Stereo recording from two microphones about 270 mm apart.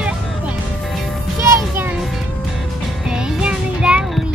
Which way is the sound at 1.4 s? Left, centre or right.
Centre.